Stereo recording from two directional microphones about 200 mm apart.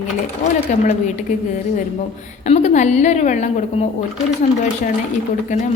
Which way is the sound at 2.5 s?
35° left (ahead or behind).